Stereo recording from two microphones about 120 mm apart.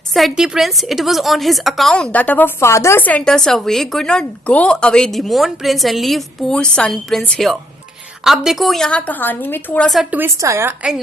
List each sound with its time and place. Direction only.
0.1 s a woman's voice: centre (ahead or behind)
10.1 s a woman's voice: 15° right (ahead or behind)